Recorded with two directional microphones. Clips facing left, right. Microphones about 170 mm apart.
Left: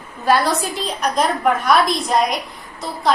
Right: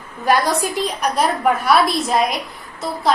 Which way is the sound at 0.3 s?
15° right (ahead or behind).